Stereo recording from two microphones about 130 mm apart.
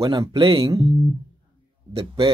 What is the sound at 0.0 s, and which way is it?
Speech, 30° right (ahead or behind).